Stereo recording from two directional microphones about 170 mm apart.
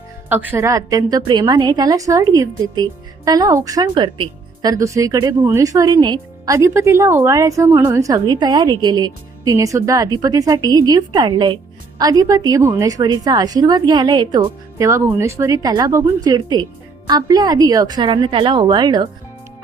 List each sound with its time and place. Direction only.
0.3 s a woman's voice: 10° right (ahead or behind)